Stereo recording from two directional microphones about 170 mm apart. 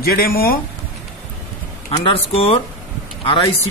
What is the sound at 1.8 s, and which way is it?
Speech, 35° left (ahead or behind).